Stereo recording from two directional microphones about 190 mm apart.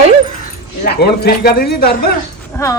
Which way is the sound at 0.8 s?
55° left (ahead or behind).